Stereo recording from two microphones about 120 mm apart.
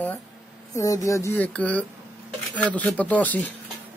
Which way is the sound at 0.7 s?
25° left (ahead or behind).